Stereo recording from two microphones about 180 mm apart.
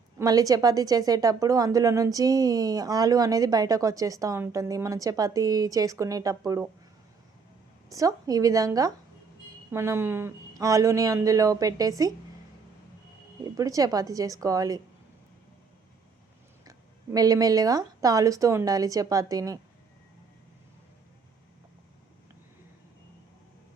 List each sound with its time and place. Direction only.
0.2 s a woman's voice: 20° right (ahead or behind)
7.9 s a woman's voice: 20° right (ahead or behind)
13.4 s a woman's voice: 20° right (ahead or behind)
16.6 s a woman's voice: 20° right (ahead or behind)